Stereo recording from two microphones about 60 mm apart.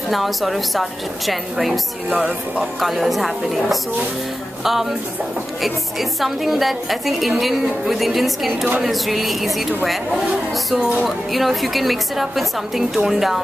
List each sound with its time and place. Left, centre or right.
0.1 s a woman's voice: centre
2.0 s speech: right
2.8 s a woman's voice: centre
4.6 s a woman's voice: centre